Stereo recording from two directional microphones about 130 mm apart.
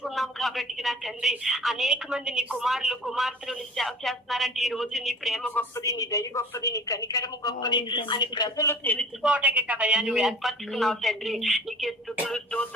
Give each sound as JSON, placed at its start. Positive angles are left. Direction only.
{"t": 0.0, "sound": "a woman's voice", "side_deg": 0}
{"t": 5.5, "sound": "a woman's voice", "side_deg": 15}
{"t": 5.8, "sound": "a woman's voice", "side_deg": 25}
{"t": 9.2, "sound": "a woman's voice", "side_deg": -10}